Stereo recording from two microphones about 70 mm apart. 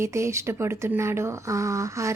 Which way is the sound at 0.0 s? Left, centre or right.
Right.